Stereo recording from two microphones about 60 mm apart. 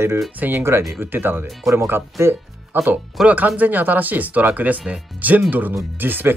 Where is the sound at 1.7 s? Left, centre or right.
Right.